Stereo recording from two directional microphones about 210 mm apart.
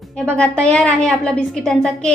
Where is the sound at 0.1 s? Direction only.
5° left (ahead or behind).